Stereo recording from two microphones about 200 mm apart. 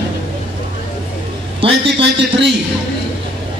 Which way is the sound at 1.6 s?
25° right (ahead or behind).